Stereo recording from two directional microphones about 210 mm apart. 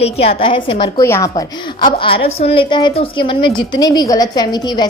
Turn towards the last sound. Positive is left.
turn(degrees=20)  # may be behind; listen again after turning